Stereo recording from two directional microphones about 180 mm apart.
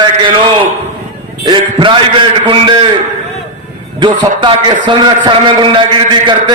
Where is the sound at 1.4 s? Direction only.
25° right (ahead or behind).